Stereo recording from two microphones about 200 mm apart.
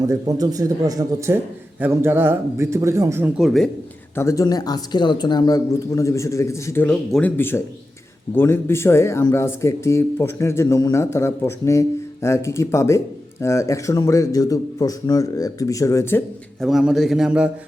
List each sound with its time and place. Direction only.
0.1 s a man's voice: 20° right (ahead or behind); by 3.7 s centre (ahead or behind)
4.1 s speech: 15° left (ahead or behind)
16.6 s a man's voice: centre (ahead or behind)